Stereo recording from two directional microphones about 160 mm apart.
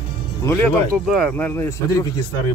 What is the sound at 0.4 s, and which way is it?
Speech, 15° left (ahead or behind).